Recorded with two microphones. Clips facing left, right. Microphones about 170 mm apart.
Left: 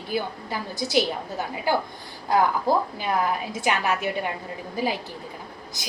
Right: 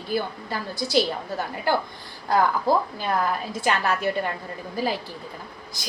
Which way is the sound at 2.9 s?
15° left (ahead or behind).